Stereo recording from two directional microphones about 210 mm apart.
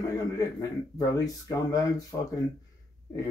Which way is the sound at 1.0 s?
15° left (ahead or behind).